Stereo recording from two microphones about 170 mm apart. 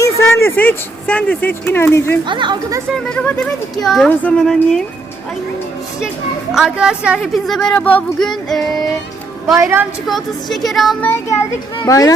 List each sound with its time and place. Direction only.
0.0 s speech: 15° left (ahead or behind)
2.2 s speech: 30° right (ahead or behind)
3.2 s speech: 10° left (ahead or behind)
6.5 s speech: 5° right (ahead or behind)
9.6 s a woman's voice: 15° right (ahead or behind)
10.1 s speech: centre (ahead or behind)
11.1 s a child's voice: 15° left (ahead or behind)